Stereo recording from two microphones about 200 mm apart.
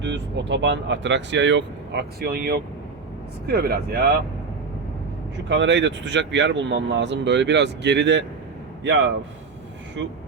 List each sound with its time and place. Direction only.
0.0 s speech: 60° right (ahead or behind)
5.5 s speech: 60° right (ahead or behind)